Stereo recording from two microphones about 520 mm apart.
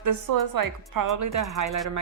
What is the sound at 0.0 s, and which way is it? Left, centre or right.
A woman's voice, right.